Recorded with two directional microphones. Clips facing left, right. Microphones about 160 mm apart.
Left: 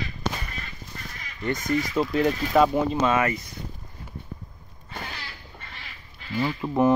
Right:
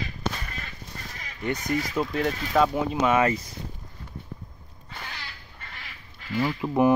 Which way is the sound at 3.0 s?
15° right (ahead or behind).